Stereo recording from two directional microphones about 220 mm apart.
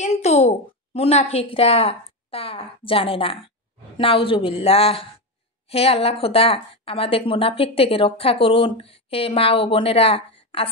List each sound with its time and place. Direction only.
0.0 s a woman's voice: 30° left (ahead or behind)